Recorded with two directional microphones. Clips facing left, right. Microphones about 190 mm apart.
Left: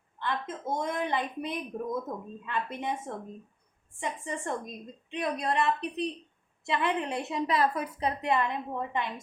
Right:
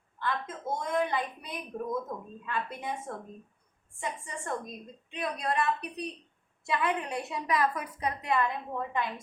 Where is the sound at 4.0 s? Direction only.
20° left (ahead or behind).